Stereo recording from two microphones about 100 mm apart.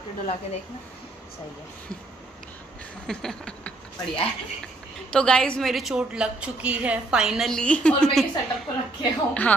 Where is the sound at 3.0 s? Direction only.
5° left (ahead or behind).